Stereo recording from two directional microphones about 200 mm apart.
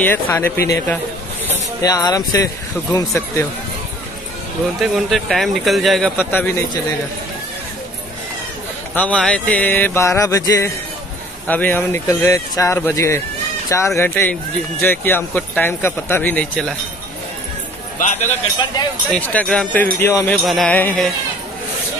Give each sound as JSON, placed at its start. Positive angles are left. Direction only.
{"t": 0.0, "sound": "speech", "side_deg": 10}
{"t": 4.9, "sound": "speech", "side_deg": 0}
{"t": 8.9, "sound": "speech", "side_deg": 5}
{"t": 17.9, "sound": "a sound", "side_deg": 35}
{"t": 19.0, "sound": "speech", "side_deg": 5}